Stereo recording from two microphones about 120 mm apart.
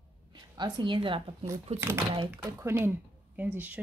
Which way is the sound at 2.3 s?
20° right (ahead or behind).